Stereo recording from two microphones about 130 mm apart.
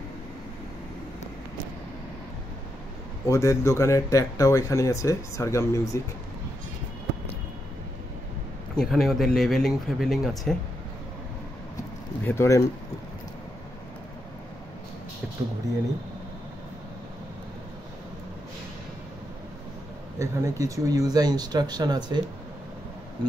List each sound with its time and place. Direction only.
3.3 s speech: 20° left (ahead or behind)
8.7 s speech: centre (ahead or behind)
12.3 s speech: 20° left (ahead or behind)
20.2 s speech: 25° right (ahead or behind)